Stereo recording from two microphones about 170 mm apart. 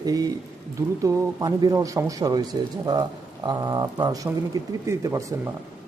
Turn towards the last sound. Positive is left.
turn(degrees=-20)  # may be behind; listen again after turning